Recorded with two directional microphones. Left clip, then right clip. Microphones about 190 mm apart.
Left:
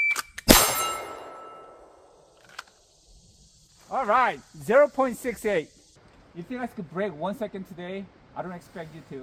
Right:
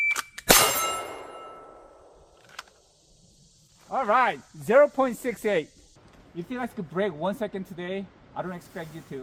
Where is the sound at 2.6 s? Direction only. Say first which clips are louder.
Left 1 dB; 5° left (ahead or behind).